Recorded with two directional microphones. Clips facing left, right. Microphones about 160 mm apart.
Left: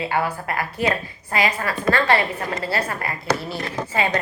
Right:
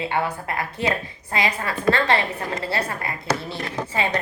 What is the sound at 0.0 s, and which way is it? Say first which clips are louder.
A woman's voice: left 1 dB; 25° right (ahead or behind).